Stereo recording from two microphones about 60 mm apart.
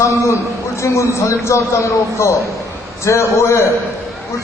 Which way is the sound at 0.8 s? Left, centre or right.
Left.